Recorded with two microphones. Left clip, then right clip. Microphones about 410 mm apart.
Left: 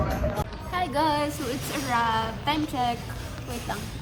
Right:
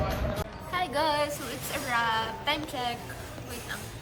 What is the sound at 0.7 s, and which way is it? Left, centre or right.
Music, centre.